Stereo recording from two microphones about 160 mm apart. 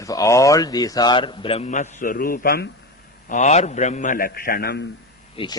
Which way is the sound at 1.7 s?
50° left (ahead or behind).